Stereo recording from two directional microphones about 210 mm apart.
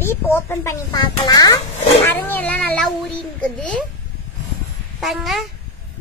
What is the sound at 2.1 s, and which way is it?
Cat, 10° left (ahead or behind).